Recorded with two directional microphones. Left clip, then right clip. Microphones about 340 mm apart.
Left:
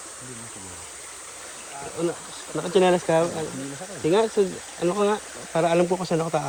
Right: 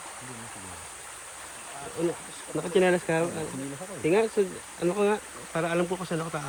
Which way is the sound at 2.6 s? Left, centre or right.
Centre.